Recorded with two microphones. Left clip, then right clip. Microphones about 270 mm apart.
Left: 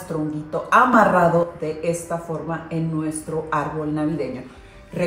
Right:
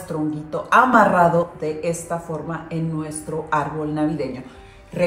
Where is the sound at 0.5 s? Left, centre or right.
Centre.